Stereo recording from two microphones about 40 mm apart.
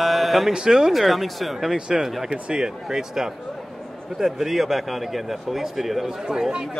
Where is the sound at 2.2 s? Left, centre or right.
Right.